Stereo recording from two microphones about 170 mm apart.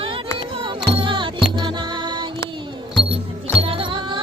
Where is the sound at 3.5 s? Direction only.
35° right (ahead or behind).